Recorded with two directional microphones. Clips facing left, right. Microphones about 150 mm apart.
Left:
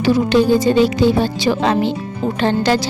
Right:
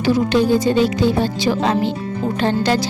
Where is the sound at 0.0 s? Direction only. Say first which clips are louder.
Left 2 dB; 80° left.